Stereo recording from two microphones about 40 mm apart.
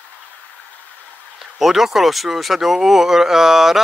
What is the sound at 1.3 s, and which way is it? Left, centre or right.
Speech, centre.